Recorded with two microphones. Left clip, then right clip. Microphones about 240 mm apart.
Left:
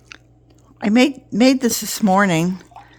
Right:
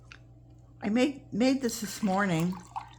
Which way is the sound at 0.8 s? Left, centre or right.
Left.